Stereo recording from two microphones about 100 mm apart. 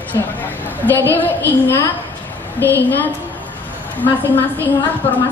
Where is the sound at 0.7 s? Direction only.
20° left (ahead or behind).